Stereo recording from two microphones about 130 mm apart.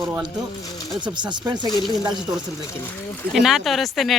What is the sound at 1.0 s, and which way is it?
Speech, 35° right (ahead or behind).